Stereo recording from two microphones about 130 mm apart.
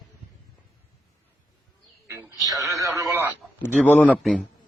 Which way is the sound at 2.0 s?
25° right (ahead or behind).